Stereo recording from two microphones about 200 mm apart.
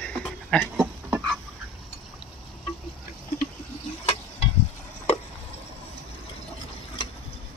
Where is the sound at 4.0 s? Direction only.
30° left (ahead or behind).